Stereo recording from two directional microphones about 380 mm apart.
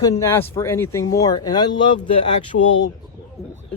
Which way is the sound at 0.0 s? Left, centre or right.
Centre.